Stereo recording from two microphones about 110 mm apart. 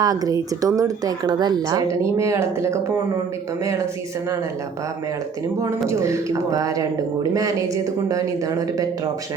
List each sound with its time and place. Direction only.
0.0 s speech: 35° right (ahead or behind)
5.9 s speech: 30° right (ahead or behind)